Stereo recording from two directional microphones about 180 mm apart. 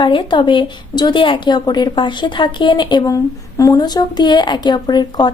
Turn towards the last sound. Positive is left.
turn(degrees=25)  # may be behind; listen again after turning